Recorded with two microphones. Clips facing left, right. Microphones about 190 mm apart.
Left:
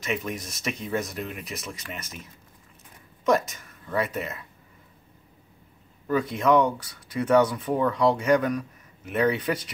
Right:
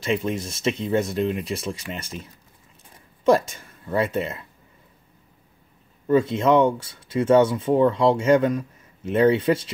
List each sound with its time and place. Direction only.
0.0 s speech: 30° right (ahead or behind)
3.3 s speech: 30° right (ahead or behind)
6.0 s speech: 25° right (ahead or behind)